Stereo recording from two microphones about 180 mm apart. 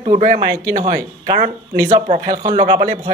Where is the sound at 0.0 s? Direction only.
40° right (ahead or behind).